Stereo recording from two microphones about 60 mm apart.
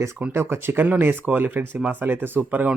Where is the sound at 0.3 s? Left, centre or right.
Right.